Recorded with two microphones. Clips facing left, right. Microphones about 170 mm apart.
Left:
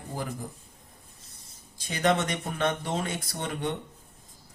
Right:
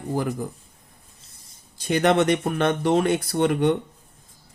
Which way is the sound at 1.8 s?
65° right (ahead or behind).